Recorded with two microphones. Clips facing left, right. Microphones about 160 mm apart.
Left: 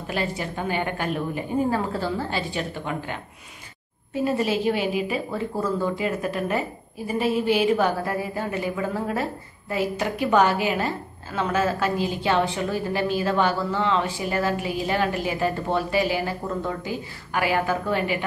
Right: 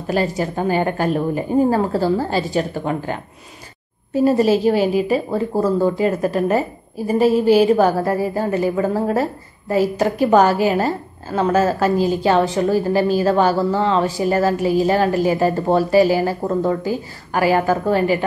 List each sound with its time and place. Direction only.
0.0 s a woman's voice: 40° right (ahead or behind)